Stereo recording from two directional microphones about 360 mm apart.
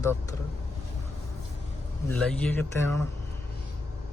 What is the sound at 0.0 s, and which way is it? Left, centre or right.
Speech, centre.